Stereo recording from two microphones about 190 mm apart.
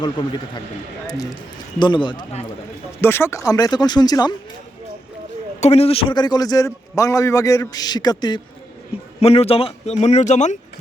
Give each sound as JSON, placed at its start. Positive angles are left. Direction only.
{"t": 0.0, "sound": "a man's voice", "side_deg": 25}
{"t": 3.0, "sound": "a man's voice", "side_deg": 10}
{"t": 5.5, "sound": "a man's voice", "side_deg": 35}
{"t": 9.2, "sound": "speech", "side_deg": 30}